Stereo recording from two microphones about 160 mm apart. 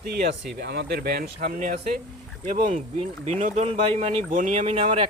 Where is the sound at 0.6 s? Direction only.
90° right; by 2.0 s 60° right (ahead or behind).